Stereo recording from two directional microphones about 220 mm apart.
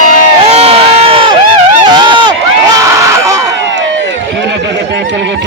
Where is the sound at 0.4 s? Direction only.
25° right (ahead or behind).